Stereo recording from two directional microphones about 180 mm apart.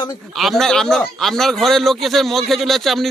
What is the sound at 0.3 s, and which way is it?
A man's voice, centre (ahead or behind).